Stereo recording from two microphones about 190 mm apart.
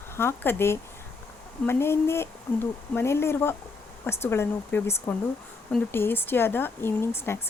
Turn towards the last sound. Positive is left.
turn(degrees=15)  # may be behind; listen again after turning